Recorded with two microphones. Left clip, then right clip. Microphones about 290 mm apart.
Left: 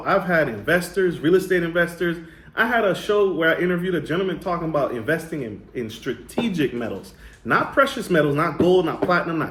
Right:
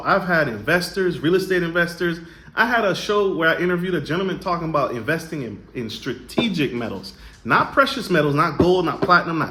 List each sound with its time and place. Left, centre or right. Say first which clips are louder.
0.0 s a man's voice: right 1 dB; right